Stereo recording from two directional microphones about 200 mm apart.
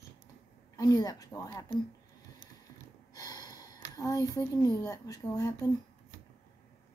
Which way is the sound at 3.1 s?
20° left (ahead or behind).